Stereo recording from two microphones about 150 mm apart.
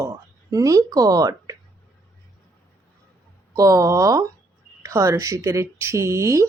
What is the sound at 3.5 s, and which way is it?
Speech, 20° right (ahead or behind).